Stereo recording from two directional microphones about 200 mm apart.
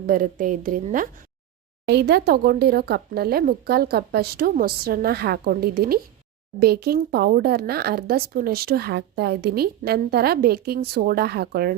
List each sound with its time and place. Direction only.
0.1 s speech: 45° right (ahead or behind)
1.9 s speech: 55° right (ahead or behind)